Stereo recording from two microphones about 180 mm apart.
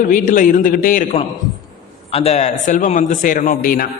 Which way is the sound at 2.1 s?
35° left (ahead or behind).